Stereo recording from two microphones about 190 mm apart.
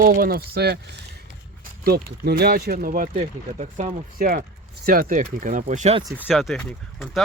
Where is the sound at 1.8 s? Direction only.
55° right (ahead or behind); by 4.3 s 35° right (ahead or behind).